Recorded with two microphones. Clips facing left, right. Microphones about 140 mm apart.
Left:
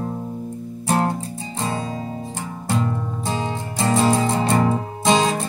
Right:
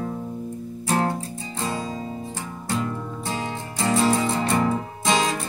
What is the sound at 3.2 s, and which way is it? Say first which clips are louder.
Music: left 4 dB; 25° left (ahead or behind).